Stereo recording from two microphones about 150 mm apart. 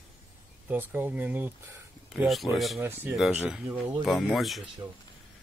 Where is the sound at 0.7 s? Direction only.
15° right (ahead or behind).